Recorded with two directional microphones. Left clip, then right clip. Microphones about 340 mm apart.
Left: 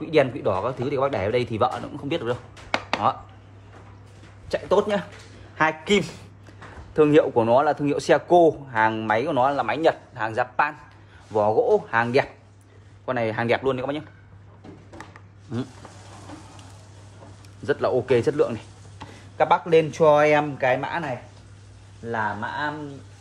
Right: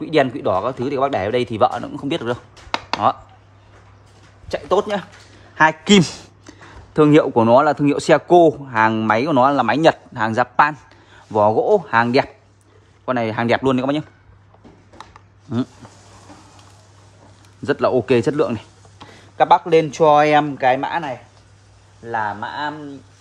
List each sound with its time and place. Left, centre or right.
0.0 s speech: right
4.5 s speech: right
15.5 s speech: right
17.6 s speech: right